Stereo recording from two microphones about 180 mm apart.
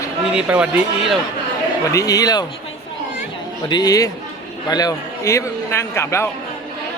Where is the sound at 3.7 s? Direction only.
20° left (ahead or behind).